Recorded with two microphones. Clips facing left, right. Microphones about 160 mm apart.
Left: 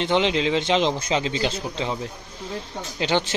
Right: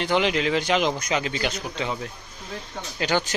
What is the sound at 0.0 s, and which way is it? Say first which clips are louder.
Speech: left 1 dB; 25° left (ahead or behind).